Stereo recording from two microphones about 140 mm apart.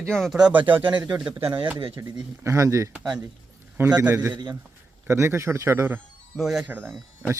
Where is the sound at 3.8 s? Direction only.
10° right (ahead or behind).